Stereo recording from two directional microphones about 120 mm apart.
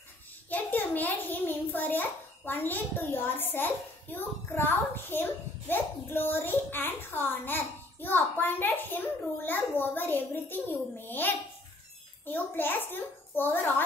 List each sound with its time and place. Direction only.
0.5 s a child's voice: 15° left (ahead or behind)